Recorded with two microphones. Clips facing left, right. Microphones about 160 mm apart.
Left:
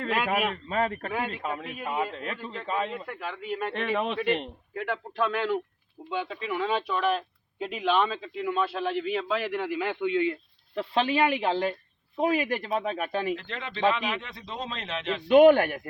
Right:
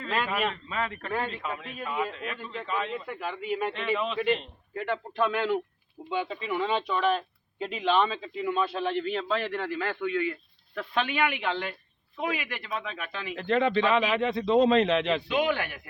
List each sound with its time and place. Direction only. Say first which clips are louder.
0.7 s speech: left 3 dB; 45° left (ahead or behind)
3.1 s speech: right 2 dB; centre (ahead or behind)
3.7 s a man's voice: left 1 dB; 60° left (ahead or behind)
4.7 s speech: right 2 dB; centre (ahead or behind); by 13.3 s 45° left (ahead or behind)
13.3 s speech: right 10 dB; 55° right (ahead or behind); by 15.2 s 75° right (ahead or behind)
15.3 s speech: left 10 dB; 50° left (ahead or behind)